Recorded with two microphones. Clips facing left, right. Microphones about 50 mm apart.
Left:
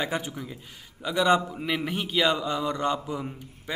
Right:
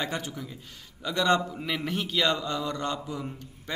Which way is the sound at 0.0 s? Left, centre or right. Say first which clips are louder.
Left 3 dB; centre.